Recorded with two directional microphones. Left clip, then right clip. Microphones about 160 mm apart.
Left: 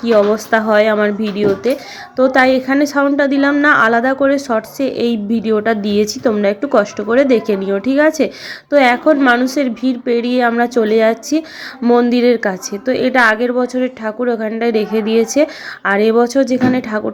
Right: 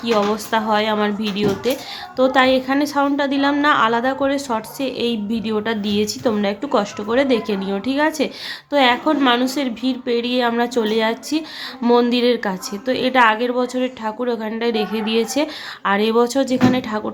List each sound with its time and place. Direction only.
0.0 s a woman's voice: 20° left (ahead or behind)